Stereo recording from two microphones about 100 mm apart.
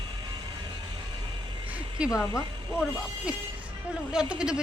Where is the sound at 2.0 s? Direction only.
10° right (ahead or behind).